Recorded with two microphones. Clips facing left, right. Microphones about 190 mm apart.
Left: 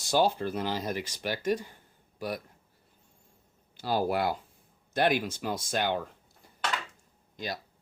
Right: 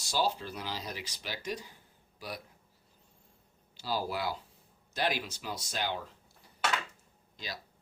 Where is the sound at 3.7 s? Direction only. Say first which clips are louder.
Left 6 dB; 55° left (ahead or behind).